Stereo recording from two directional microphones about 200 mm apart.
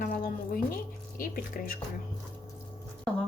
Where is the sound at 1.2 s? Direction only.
45° left (ahead or behind).